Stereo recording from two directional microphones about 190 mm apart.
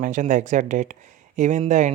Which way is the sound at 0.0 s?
40° right (ahead or behind).